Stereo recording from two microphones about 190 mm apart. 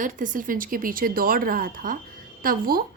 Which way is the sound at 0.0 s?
45° right (ahead or behind).